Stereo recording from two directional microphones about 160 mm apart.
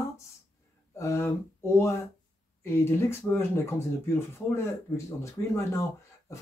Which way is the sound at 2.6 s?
15° left (ahead or behind).